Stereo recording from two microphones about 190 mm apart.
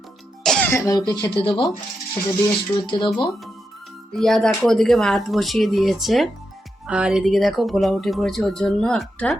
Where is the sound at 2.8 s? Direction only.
25° left (ahead or behind).